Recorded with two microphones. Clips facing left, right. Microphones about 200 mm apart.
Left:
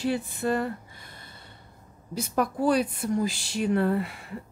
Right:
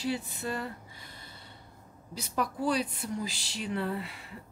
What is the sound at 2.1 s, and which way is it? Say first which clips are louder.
Speech: left 6 dB; 50° left (ahead or behind).